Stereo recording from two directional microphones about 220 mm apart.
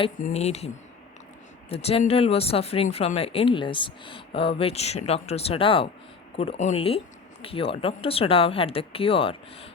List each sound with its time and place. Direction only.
0.2 s speech: 30° left (ahead or behind)
1.7 s speech: 25° left (ahead or behind)